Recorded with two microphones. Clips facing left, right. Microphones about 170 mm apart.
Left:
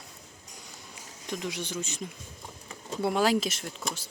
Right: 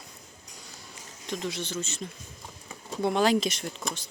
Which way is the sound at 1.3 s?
10° left (ahead or behind).